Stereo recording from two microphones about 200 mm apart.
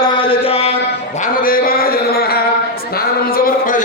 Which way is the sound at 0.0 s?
25° left (ahead or behind).